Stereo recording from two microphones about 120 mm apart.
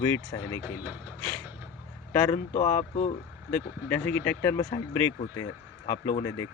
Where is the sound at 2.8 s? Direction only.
90° left.